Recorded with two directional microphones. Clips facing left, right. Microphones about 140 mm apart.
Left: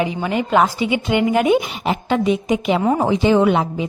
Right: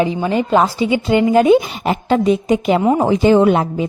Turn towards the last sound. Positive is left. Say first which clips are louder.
# right 3 dB
turn(degrees=-40)  # may be behind; listen again after turning